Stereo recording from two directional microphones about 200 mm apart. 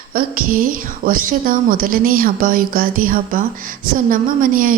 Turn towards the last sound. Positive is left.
turn(degrees=-45)  # may be behind; listen again after turning